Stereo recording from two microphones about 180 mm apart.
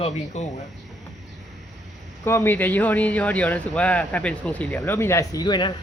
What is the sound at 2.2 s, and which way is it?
Speech, 15° left (ahead or behind).